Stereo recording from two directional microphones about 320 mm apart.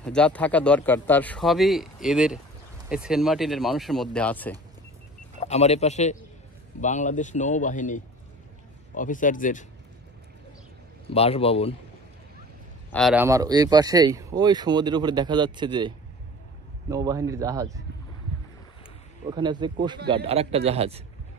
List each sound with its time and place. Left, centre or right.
0.0 s speech: centre
5.4 s speech: centre
11.1 s speech: centre
12.9 s speech: centre
16.9 s speech: centre
19.3 s a man's voice: centre